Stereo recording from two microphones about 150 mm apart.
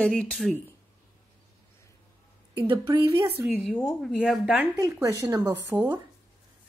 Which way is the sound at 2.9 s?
20° right (ahead or behind).